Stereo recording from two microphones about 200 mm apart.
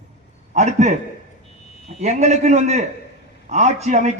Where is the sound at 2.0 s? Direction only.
35° right (ahead or behind).